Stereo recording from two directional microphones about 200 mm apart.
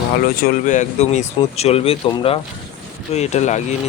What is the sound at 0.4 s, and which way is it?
A man's voice, 40° left (ahead or behind).